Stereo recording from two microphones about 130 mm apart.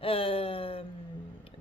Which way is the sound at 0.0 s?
45° left (ahead or behind).